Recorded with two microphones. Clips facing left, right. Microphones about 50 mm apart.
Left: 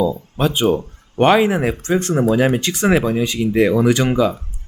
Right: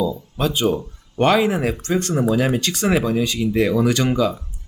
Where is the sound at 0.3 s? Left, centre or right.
Left.